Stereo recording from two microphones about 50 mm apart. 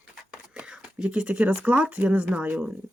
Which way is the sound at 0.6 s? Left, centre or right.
Centre.